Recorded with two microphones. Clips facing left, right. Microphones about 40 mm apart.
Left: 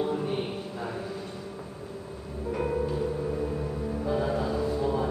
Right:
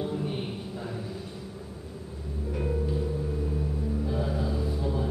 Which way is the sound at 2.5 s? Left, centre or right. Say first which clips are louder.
Left 2 dB; left.